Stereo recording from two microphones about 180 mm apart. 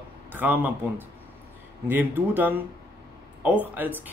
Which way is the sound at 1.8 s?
10° right (ahead or behind).